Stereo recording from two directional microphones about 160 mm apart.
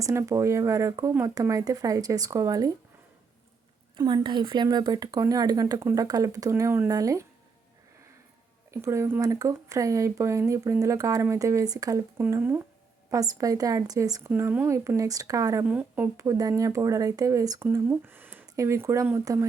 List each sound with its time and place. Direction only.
0.0 s speech: 20° right (ahead or behind)
3.9 s speech: 25° right (ahead or behind)
8.7 s speech: 15° right (ahead or behind)
15.6 s speech: 10° right (ahead or behind)